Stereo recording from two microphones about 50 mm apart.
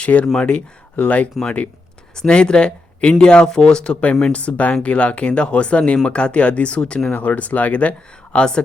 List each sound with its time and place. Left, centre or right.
0.0 s speech: left
2.1 s speech: centre
4.4 s speech: left
7.1 s speech: left